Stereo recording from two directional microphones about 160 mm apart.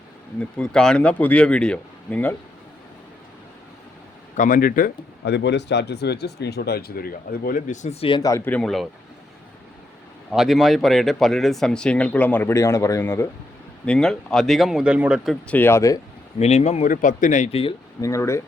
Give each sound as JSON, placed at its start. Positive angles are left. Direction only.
{"t": 0.3, "sound": "speech", "side_deg": 5}
{"t": 4.4, "sound": "speech", "side_deg": 60}
{"t": 8.2, "sound": "speech", "side_deg": 15}
{"t": 10.3, "sound": "speech", "side_deg": 0}
{"t": 13.8, "sound": "speech", "side_deg": 5}
{"t": 15.5, "sound": "speech", "side_deg": 15}
{"t": 16.4, "sound": "speech", "side_deg": 40}
{"t": 18.0, "sound": "speech", "side_deg": 20}